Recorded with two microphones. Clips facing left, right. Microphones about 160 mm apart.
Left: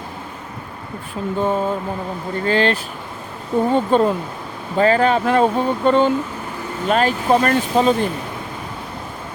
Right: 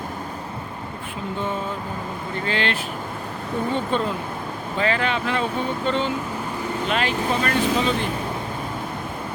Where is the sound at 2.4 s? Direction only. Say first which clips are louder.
Left 8 dB; 40° left (ahead or behind).